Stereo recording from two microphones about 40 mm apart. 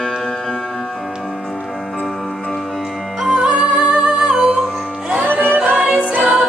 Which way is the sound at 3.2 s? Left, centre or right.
Right.